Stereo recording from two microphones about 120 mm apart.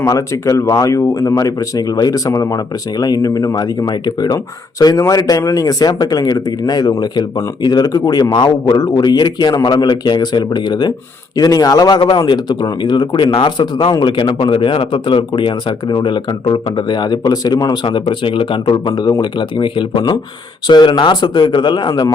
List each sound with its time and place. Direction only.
0.0 s speech: 30° left (ahead or behind)
11.9 s speech: 45° left (ahead or behind)
12.2 s speech: 35° left (ahead or behind)
18.1 s speech: 45° left (ahead or behind)